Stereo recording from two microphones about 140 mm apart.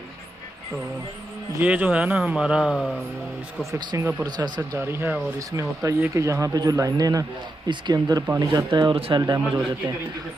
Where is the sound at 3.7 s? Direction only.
25° right (ahead or behind).